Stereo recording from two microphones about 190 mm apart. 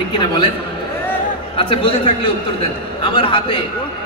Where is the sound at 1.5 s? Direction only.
30° left (ahead or behind).